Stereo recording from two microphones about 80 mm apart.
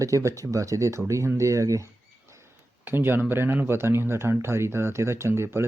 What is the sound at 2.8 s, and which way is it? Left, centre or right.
Speech, right.